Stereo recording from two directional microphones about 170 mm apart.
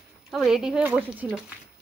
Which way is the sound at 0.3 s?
Centre (ahead or behind).